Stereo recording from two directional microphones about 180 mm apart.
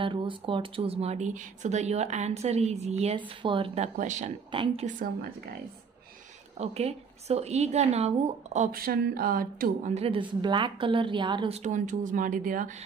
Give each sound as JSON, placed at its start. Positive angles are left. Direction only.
{"t": 0.0, "sound": "speech", "side_deg": -25}
{"t": 4.5, "sound": "a woman's voice", "side_deg": -30}
{"t": 4.8, "sound": "speech", "side_deg": -50}
{"t": 6.6, "sound": "speech", "side_deg": -35}
{"t": 8.7, "sound": "speech", "side_deg": -55}
{"t": 9.9, "sound": "speech", "side_deg": -30}